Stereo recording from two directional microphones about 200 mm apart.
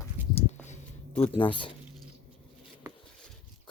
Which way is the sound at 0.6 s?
35° left (ahead or behind).